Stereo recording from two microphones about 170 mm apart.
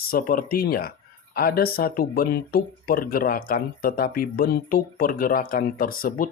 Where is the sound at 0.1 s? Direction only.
60° left (ahead or behind).